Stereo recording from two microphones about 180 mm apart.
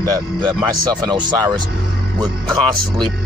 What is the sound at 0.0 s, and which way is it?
Speech, 20° right (ahead or behind).